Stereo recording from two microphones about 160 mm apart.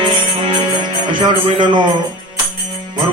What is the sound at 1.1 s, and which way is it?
Speech, 30° right (ahead or behind).